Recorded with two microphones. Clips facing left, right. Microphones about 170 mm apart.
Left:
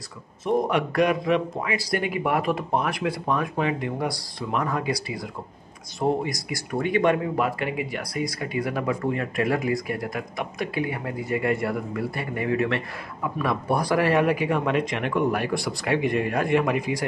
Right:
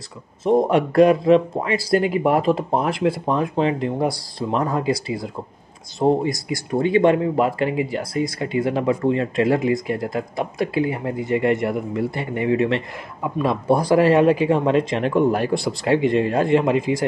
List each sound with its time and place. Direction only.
0.5 s speech: 30° right (ahead or behind)